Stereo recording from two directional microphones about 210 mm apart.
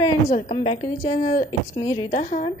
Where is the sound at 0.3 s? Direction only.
25° left (ahead or behind).